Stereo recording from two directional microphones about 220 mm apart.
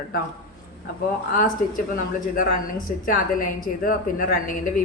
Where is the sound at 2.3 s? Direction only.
40° left (ahead or behind).